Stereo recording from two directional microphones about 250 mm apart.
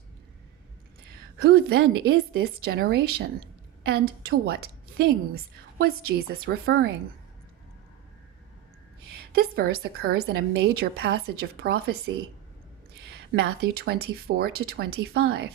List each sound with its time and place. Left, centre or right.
1.4 s a woman's voice: right
9.1 s a woman's voice: right